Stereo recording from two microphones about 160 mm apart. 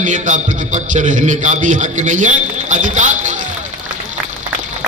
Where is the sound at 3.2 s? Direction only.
50° right (ahead or behind).